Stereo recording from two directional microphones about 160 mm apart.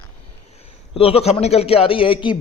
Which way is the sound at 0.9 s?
35° left (ahead or behind).